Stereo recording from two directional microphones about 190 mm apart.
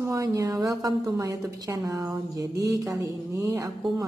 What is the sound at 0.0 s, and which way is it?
A woman's voice, 15° right (ahead or behind).